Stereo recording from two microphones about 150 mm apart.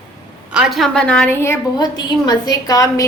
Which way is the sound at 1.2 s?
15° left (ahead or behind).